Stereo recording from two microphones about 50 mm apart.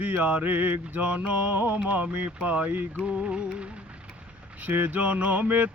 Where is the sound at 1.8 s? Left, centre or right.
Right.